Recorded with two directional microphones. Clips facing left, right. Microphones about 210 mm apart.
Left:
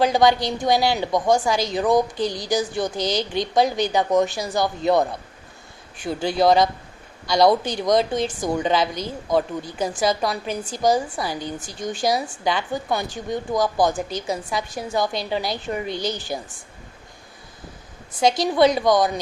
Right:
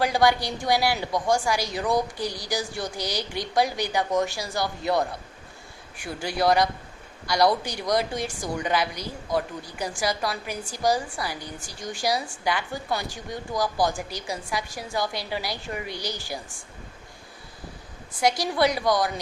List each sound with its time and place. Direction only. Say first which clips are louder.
0.0 s speech: left 4 dB; 20° left (ahead or behind)
7.6 s speech: left 6 dB; 20° left (ahead or behind)
18.1 s speech: left 5 dB; 20° left (ahead or behind)